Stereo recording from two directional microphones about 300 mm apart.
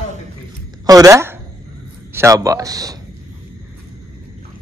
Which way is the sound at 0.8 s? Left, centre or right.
Centre.